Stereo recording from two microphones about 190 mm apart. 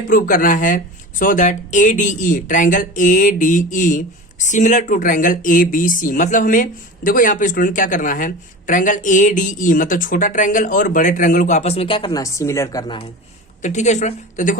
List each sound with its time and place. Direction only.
0.1 s speech: 45° left (ahead or behind); by 13.0 s 20° left (ahead or behind)
13.6 s a woman's voice: 40° left (ahead or behind)